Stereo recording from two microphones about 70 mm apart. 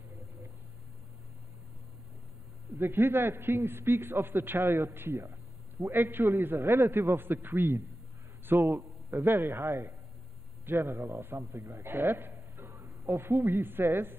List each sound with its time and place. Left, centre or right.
2.8 s a man's voice: right
12.5 s a woman's voice: right